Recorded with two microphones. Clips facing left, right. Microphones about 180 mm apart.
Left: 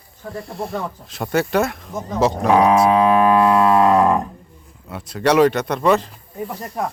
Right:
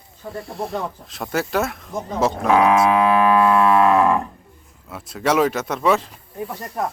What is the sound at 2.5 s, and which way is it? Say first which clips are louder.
Speech: left 1 dB; 25° left (ahead or behind).